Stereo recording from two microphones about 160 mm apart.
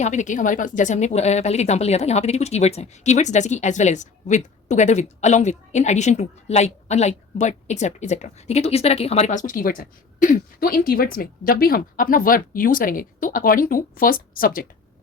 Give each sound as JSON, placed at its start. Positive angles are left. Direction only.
{"t": 0.0, "sound": "a woman's voice", "side_deg": 50}